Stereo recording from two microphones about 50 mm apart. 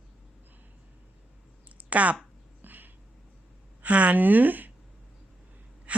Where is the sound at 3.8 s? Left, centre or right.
Right.